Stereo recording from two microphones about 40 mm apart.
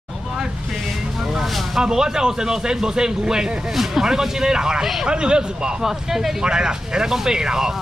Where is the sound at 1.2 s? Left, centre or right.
Centre.